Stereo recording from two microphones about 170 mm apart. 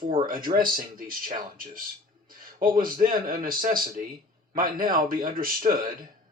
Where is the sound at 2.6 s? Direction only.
55° right (ahead or behind).